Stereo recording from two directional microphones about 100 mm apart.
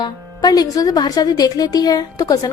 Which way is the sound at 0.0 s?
40° left (ahead or behind).